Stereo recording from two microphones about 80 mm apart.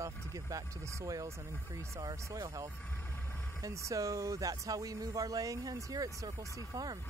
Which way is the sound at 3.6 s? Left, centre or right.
Right.